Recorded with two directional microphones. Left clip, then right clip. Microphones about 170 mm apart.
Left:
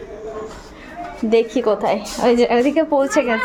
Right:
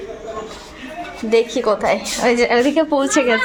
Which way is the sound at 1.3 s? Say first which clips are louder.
Even; 20° left (ahead or behind).